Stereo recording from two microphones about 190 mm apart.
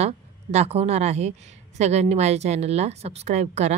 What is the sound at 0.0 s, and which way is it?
A woman's voice, 35° right (ahead or behind).